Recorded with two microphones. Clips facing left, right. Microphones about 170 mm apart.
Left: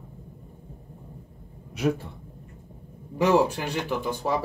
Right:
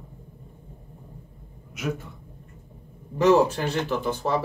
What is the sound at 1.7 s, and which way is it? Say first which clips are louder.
Speech: left 5 dB; 35° left (ahead or behind).